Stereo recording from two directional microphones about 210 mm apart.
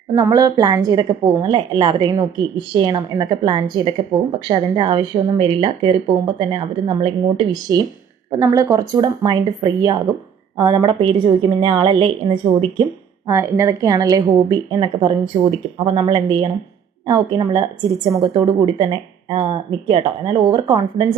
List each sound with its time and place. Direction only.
0.1 s a woman's voice: 20° right (ahead or behind)